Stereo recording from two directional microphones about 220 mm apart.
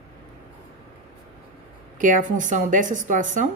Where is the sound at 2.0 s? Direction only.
35° right (ahead or behind).